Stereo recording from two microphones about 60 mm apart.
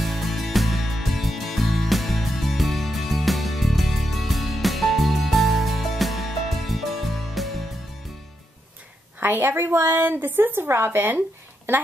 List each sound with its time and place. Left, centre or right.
0.0 s music: centre
9.2 s a woman's voice: right
10.1 s a woman's voice: right